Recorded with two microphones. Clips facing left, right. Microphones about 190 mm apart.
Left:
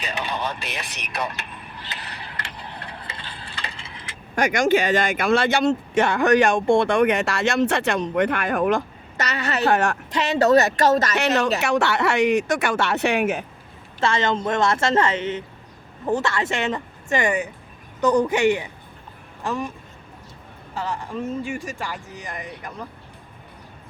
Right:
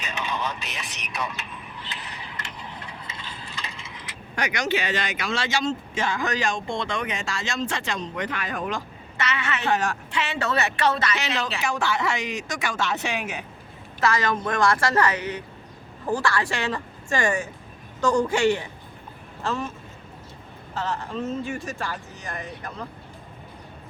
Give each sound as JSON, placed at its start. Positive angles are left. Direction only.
{"t": 0.0, "sound": "speech", "side_deg": 35}
{"t": 0.6, "sound": "speech", "side_deg": 65}
{"t": 1.9, "sound": "a sound", "side_deg": 70}
{"t": 2.6, "sound": "gears", "side_deg": 65}
{"t": 3.2, "sound": "a sound", "side_deg": 30}
{"t": 4.4, "sound": "speech", "side_deg": 50}
{"t": 9.1, "sound": "speech", "side_deg": 40}
{"t": 9.7, "sound": "speech", "side_deg": 55}
{"t": 10.1, "sound": "speech", "side_deg": 40}
{"t": 11.6, "sound": "speech", "side_deg": 70}
{"t": 14.0, "sound": "a woman's voice", "side_deg": 25}
{"t": 20.7, "sound": "speech", "side_deg": 10}